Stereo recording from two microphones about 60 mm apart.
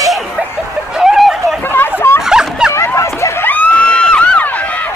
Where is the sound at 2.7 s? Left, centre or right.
Left.